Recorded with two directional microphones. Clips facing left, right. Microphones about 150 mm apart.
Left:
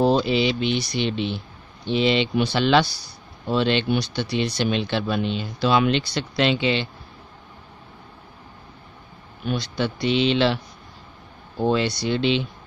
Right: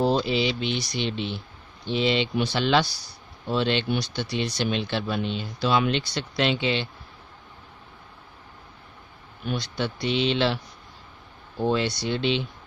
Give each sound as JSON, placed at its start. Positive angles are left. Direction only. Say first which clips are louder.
{"t": 0.0, "sound": "speech", "louder": "left 4 dB", "side_deg": 70}
{"t": 1.9, "sound": "speech", "louder": "left 3 dB", "side_deg": 80}
{"t": 9.6, "sound": "speech", "louder": "left 4 dB", "side_deg": 90}
{"t": 11.6, "sound": "speech", "louder": "left 3 dB", "side_deg": 90}